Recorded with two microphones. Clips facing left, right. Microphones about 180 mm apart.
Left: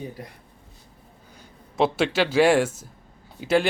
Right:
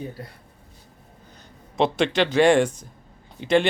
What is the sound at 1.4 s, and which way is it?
Speech, 5° left (ahead or behind).